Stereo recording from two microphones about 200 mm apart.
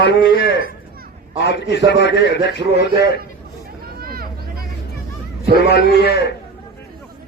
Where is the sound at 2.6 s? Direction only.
30° right (ahead or behind).